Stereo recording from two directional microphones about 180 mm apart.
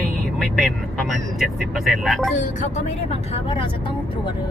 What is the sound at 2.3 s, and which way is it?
Speech, 45° left (ahead or behind).